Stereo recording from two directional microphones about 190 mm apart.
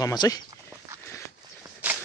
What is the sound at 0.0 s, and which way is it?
Speech, 20° left (ahead or behind).